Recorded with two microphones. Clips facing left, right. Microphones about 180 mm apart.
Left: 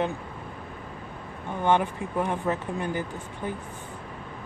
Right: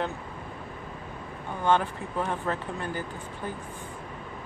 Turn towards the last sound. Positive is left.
turn(degrees=15)  # may be behind; listen again after turning